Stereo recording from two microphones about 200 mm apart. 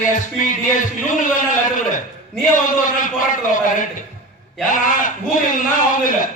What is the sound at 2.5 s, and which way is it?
A man's voice, 40° left (ahead or behind).